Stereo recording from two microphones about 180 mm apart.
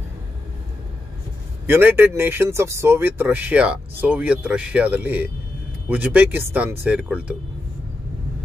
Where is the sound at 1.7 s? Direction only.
10° right (ahead or behind).